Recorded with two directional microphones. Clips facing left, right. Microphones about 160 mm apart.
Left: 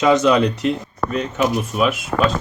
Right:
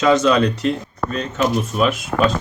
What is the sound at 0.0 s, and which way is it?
Speech, 15° left (ahead or behind).